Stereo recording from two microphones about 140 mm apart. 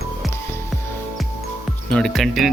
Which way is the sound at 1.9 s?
5° left (ahead or behind).